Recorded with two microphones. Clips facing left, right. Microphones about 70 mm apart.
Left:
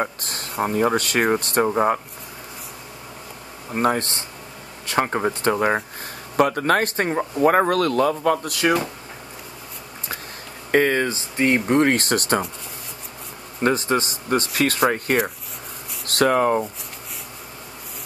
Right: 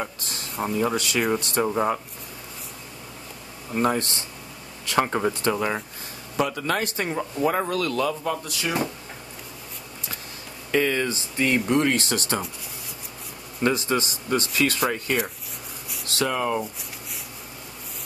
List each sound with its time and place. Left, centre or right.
0.0 s speech: left
3.8 s speech: left
4.8 s speech: left
5.5 s speech: left
7.4 s speech: left
10.7 s speech: left
13.6 s speech: left